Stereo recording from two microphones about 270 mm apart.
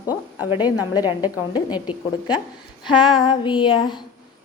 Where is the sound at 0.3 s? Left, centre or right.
Centre.